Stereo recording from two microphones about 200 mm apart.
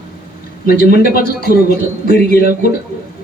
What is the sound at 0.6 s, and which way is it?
A man's voice, 50° left (ahead or behind).